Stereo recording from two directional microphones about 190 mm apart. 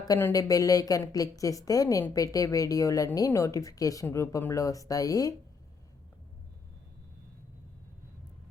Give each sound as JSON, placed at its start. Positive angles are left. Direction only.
{"t": 0.1, "sound": "a woman's voice", "side_deg": 15}